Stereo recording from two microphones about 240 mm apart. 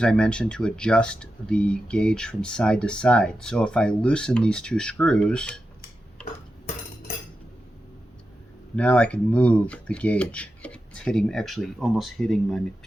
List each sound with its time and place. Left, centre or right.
0.0 s speech: centre
6.2 s dishes: left
8.7 s speech: centre